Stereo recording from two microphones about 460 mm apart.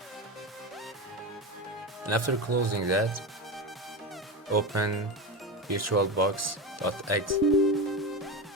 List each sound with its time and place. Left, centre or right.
2.0 s speech: right
4.7 s speech: right
7.5 s music: centre